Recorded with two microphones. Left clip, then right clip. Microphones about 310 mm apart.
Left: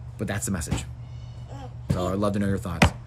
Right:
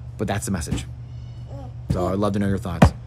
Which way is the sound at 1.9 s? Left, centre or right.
Centre.